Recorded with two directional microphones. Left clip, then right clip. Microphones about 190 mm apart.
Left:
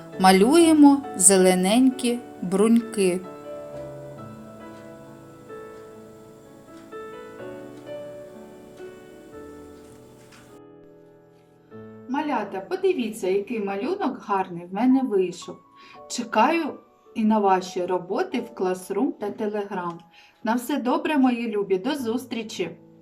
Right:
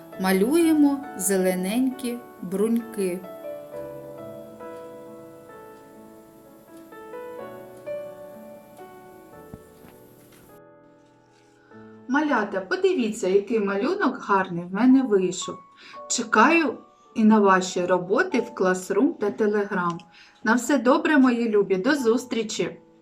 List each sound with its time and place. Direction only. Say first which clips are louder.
0.2 s speech: left 5 dB; 15° left (ahead or behind)
12.8 s speech: even; 10° left (ahead or behind)